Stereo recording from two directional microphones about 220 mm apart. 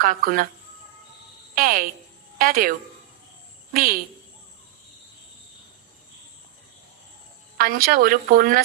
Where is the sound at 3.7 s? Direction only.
40° right (ahead or behind).